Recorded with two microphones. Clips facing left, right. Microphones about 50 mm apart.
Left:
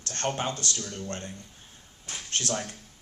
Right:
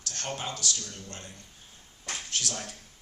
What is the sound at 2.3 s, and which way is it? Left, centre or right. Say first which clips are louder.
Speech: left 5 dB; left.